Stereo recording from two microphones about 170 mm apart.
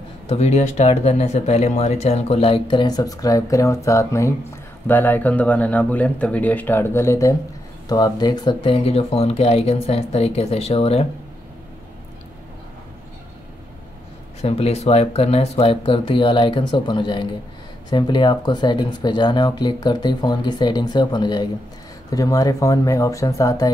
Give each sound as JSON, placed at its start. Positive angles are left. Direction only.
{"t": 0.3, "sound": "speech", "side_deg": 40}
{"t": 14.4, "sound": "speech", "side_deg": 40}